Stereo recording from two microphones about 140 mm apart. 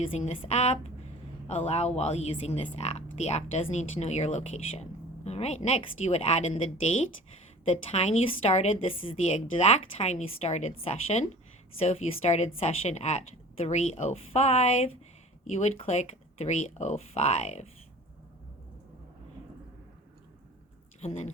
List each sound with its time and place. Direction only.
0.2 s speech: 50° left (ahead or behind)
7.9 s speech: 50° left (ahead or behind)
21.0 s speech: 55° left (ahead or behind)